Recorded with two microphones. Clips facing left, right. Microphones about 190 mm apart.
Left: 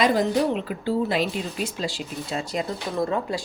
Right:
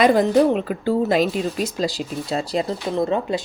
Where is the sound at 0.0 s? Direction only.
55° right (ahead or behind).